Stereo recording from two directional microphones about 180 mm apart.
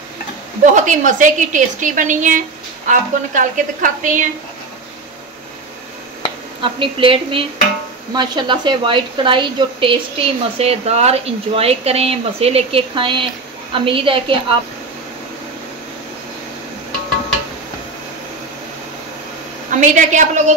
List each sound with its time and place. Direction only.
0.7 s a woman's voice: 45° right (ahead or behind)
6.6 s a woman's voice: 30° right (ahead or behind)
19.7 s a woman's voice: 45° right (ahead or behind)